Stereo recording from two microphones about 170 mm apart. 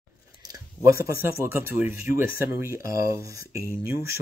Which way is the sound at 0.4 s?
20° right (ahead or behind).